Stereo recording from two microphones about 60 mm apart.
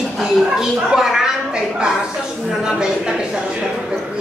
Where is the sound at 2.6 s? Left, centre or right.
Centre.